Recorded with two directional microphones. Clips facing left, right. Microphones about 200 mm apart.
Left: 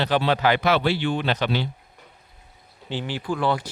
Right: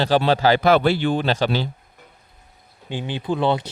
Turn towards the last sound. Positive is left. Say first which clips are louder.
# right 3 dB
turn(degrees=-25)  # may be behind; listen again after turning